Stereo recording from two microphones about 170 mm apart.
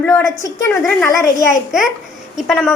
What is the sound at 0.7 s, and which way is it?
A woman's voice, 5° left (ahead or behind).